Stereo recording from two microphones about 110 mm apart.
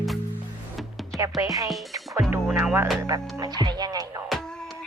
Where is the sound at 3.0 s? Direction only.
30° right (ahead or behind).